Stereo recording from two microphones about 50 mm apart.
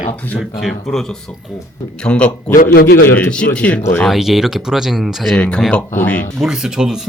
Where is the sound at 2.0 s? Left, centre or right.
Centre.